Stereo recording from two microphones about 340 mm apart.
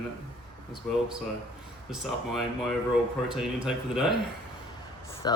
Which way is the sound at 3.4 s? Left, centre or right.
Centre.